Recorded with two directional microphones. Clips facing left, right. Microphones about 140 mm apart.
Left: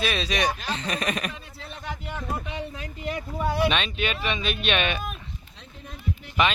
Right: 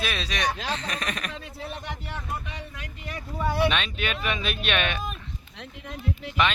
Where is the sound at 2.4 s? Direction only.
30° left (ahead or behind).